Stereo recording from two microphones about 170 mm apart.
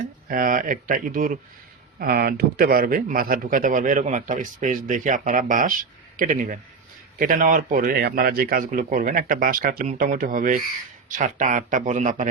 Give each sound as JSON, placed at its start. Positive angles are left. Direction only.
{"t": 0.3, "sound": "speech", "side_deg": -55}
{"t": 2.0, "sound": "a man's voice", "side_deg": -65}